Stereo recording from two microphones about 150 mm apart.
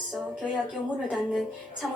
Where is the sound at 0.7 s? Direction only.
Centre (ahead or behind).